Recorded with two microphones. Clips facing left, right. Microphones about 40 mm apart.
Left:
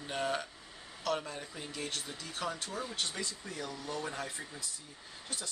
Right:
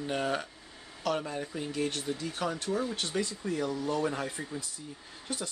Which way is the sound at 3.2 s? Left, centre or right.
Right.